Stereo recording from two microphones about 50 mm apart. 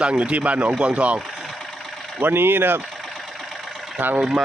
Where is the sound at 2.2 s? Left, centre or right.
Right.